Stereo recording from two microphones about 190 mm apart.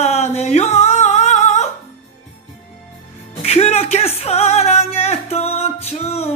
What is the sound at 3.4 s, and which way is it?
Music, 30° left (ahead or behind).